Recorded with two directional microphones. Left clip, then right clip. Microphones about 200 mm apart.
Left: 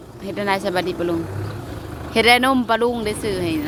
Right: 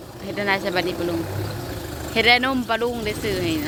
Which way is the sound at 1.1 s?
50° right (ahead or behind).